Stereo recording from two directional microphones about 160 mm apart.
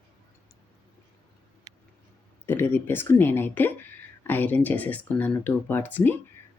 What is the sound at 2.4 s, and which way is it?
Speech, 15° left (ahead or behind).